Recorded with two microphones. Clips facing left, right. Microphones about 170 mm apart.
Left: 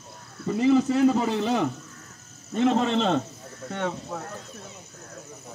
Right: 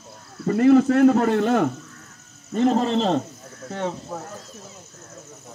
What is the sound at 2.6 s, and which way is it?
Speech, 40° right (ahead or behind).